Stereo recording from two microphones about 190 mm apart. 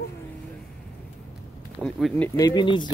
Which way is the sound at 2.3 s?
20° left (ahead or behind).